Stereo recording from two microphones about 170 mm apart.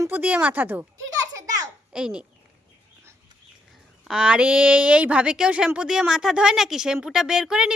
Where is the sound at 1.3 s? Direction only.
20° right (ahead or behind).